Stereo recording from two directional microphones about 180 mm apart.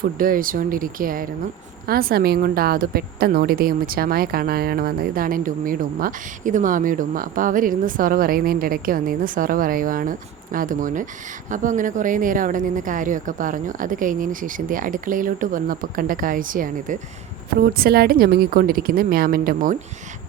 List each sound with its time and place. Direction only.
0.0 s a woman's voice: 50° right (ahead or behind)